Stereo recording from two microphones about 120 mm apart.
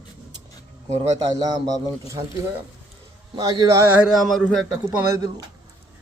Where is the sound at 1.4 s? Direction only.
35° right (ahead or behind).